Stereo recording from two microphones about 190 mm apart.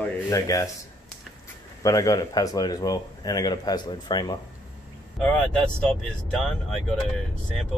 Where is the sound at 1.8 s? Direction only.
20° left (ahead or behind).